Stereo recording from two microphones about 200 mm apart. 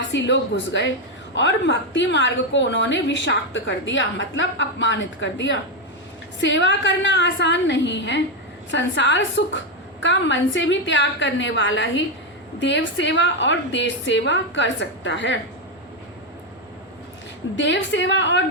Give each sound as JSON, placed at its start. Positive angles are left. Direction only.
{"t": 0.1, "sound": "a woman's voice", "side_deg": 65}
{"t": 17.6, "sound": "a woman's voice", "side_deg": 65}